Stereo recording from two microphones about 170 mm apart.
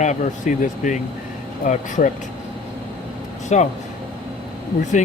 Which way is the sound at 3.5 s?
45° left (ahead or behind).